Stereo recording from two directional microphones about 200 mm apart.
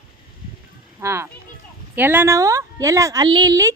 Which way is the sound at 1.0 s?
15° right (ahead or behind).